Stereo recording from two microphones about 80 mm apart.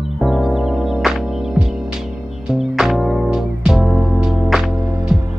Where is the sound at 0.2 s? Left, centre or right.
Centre.